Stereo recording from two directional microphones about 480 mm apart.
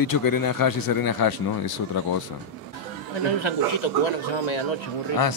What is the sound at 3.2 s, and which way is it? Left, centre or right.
Speech, left.